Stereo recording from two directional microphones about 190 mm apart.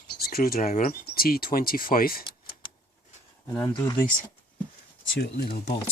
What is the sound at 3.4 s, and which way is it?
Speech, 10° left (ahead or behind).